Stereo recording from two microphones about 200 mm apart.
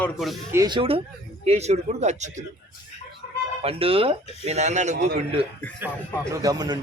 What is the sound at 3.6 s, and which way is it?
Speech, 30° right (ahead or behind).